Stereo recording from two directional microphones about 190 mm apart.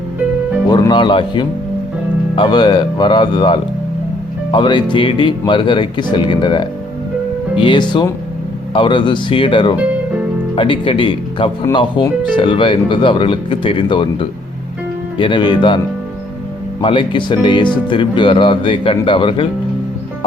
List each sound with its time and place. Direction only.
0.7 s speech: 20° left (ahead or behind)
16.8 s speech: 25° left (ahead or behind)